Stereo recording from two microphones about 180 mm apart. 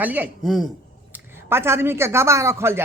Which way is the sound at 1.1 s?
15° right (ahead or behind).